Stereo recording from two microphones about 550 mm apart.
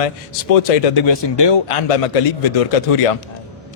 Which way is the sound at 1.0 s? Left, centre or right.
Left.